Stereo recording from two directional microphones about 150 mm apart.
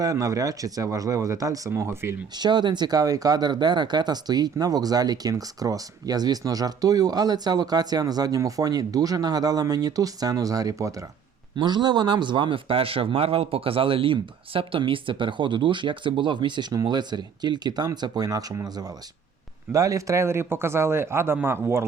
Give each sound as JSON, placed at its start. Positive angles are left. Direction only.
{"t": 0.0, "sound": "speech", "side_deg": -20}
{"t": 2.4, "sound": "a man's voice", "side_deg": -30}